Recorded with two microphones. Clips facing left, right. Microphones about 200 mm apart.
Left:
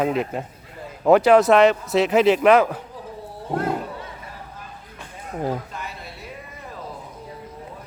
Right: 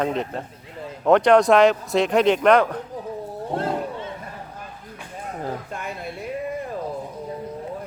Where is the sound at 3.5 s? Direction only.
30° right (ahead or behind).